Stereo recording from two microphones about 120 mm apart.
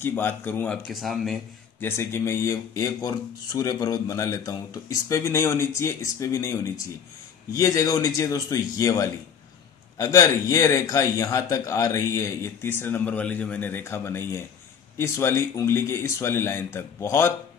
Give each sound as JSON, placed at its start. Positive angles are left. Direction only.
{"t": 0.0, "sound": "speech", "side_deg": 20}
{"t": 0.8, "sound": "speech", "side_deg": 0}
{"t": 1.8, "sound": "speech", "side_deg": 20}